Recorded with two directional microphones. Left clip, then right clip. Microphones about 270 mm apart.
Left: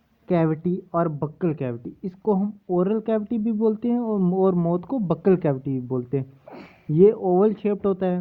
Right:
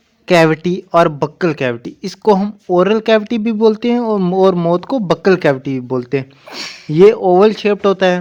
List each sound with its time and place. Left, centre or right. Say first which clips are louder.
0.3 s speech: right 12 dB; centre
1.4 s speech: right 10 dB; centre